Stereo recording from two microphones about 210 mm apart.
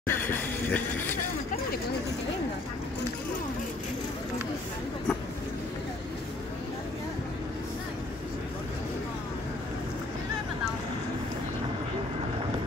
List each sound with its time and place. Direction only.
0.0 s speech: 10° left (ahead or behind)